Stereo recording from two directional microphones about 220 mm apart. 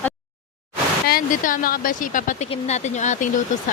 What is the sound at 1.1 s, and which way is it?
Speech, 40° left (ahead or behind).